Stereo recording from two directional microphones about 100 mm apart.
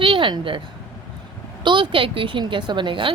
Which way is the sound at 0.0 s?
60° right (ahead or behind).